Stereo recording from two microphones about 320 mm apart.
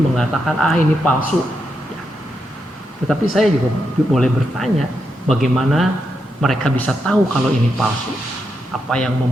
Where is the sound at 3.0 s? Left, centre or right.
Centre.